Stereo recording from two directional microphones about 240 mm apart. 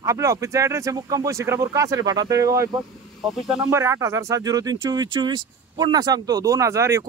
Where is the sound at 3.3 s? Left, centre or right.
Centre.